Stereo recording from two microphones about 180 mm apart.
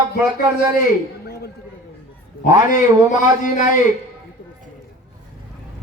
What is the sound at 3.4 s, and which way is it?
Speech, 45° left (ahead or behind).